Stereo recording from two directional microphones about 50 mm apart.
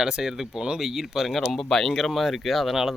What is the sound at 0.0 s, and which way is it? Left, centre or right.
Speech, centre.